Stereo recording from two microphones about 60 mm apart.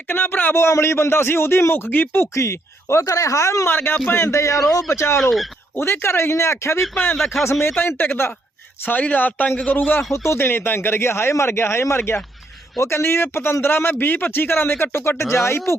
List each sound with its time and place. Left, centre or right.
0.1 s speech: left
2.3 s speech: left
3.7 s speech: left
4.1 s speech: left
7.8 s speech: left